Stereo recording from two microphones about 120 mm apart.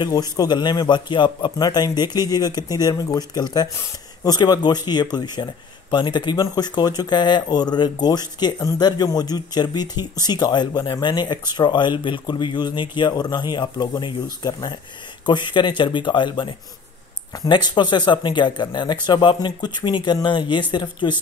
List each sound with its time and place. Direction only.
0.0 s speech: 30° left (ahead or behind)